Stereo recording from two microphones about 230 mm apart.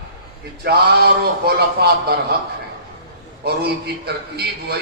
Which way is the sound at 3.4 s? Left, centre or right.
Right.